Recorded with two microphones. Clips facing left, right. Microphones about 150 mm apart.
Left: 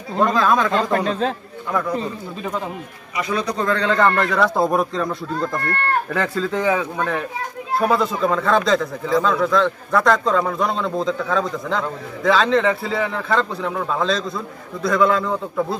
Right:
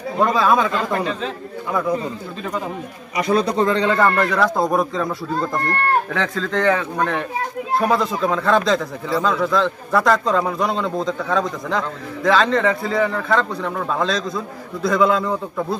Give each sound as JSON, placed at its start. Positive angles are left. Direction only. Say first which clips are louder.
{"t": 0.2, "sound": "a man's voice", "louder": "right 1 dB", "side_deg": -5}
{"t": 1.7, "sound": "a man's voice", "louder": "right 2 dB", "side_deg": -5}
{"t": 3.2, "sound": "a man's voice", "louder": "right 5 dB", "side_deg": -35}
{"t": 3.7, "sound": "a man's voice", "louder": "left 3 dB", "side_deg": -10}
{"t": 6.1, "sound": "a man's voice", "louder": "even", "side_deg": 5}